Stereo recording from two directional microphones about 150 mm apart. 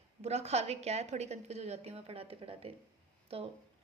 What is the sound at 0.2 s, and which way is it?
A woman's voice, 45° right (ahead or behind).